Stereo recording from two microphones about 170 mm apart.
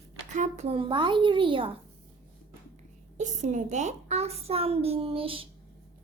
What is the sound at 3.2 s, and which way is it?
A child's voice, 45° right (ahead or behind).